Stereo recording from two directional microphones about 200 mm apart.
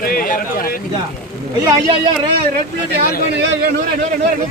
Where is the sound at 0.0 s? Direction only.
45° left (ahead or behind).